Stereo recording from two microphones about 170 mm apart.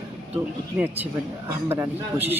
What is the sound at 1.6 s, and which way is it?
Speech, 10° right (ahead or behind).